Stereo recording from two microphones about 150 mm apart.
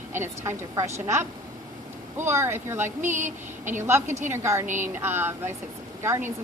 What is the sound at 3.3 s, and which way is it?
Speech, 55° right (ahead or behind).